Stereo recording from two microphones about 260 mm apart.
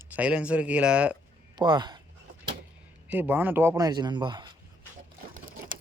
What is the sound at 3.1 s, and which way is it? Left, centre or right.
Speech, centre.